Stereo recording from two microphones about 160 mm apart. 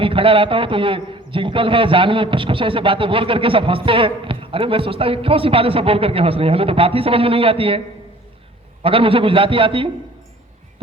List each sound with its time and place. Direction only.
0.0 s a man's voice: 35° right (ahead or behind)
8.8 s a man's voice: 35° right (ahead or behind)